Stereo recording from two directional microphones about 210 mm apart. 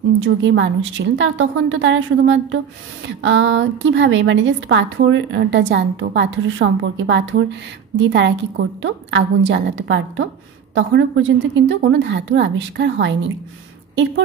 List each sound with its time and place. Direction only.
0.2 s a woman's voice: 65° right (ahead or behind)